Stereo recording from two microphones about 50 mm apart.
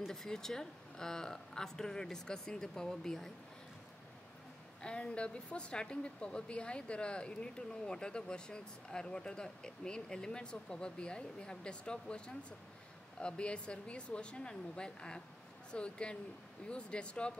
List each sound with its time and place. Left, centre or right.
0.1 s a woman's voice: centre
4.8 s a woman's voice: left